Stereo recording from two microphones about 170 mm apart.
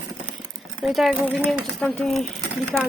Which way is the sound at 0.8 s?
Centre (ahead or behind).